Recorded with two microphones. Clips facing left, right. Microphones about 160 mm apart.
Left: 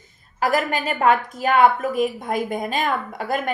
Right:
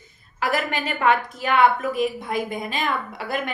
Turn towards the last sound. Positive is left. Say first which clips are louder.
# left 4 dB
turn(degrees=45)  # may be behind; listen again after turning